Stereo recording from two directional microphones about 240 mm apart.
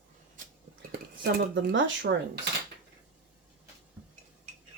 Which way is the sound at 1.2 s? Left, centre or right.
Right.